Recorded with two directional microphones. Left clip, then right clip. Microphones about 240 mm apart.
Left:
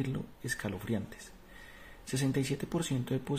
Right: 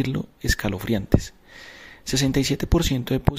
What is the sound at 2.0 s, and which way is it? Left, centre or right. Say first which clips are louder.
Speech: right 11 dB; right.